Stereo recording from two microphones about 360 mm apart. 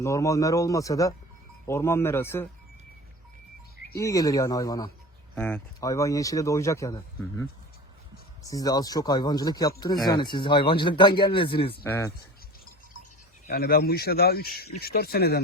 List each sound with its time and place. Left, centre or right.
0.0 s speech: centre
3.9 s speech: centre
8.4 s speech: centre
13.5 s speech: left